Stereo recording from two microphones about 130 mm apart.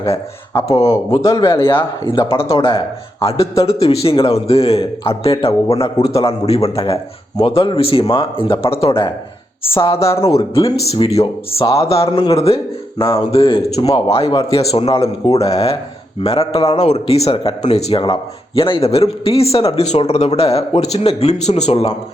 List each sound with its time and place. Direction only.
0.7 s speech: 25° left (ahead or behind)
2.0 s a man's voice: 45° left (ahead or behind)